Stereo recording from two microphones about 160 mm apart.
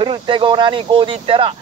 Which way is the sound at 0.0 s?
30° right (ahead or behind).